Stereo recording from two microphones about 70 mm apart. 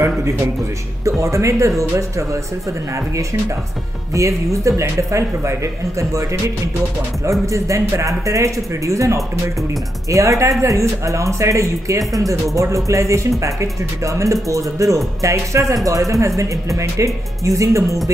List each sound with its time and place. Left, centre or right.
1.0 s speech: right
4.1 s speech: right
7.2 s speech: right